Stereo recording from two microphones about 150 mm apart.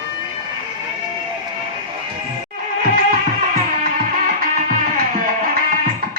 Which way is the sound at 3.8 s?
65° right (ahead or behind).